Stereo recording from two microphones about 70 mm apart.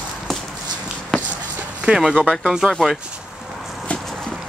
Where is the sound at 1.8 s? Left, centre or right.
Centre.